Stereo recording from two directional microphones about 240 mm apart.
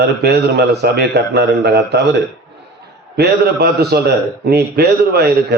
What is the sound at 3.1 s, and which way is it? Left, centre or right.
A man's voice, right.